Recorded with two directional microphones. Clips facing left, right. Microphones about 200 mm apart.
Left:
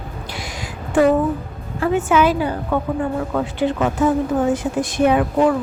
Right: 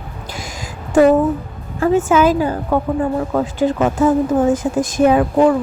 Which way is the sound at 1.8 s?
45° right (ahead or behind).